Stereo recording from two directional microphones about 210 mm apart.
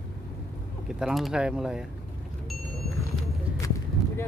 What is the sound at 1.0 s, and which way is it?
Speech, centre (ahead or behind).